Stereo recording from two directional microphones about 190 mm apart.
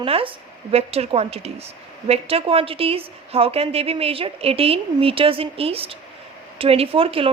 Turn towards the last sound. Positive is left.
turn(degrees=-30)  # may be behind; listen again after turning